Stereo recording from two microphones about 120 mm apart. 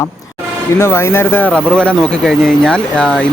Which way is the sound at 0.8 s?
20° left (ahead or behind).